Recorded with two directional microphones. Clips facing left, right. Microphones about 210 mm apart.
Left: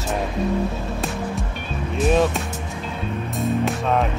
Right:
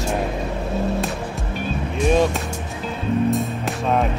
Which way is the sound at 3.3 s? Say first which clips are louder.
Even; centre (ahead or behind).